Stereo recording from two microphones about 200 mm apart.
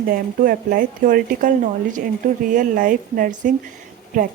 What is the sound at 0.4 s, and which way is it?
Speech, 45° right (ahead or behind).